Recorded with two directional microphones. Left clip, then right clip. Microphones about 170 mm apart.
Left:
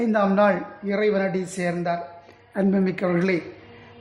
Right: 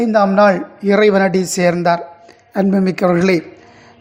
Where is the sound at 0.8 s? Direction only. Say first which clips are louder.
Right 11 dB; 35° right (ahead or behind).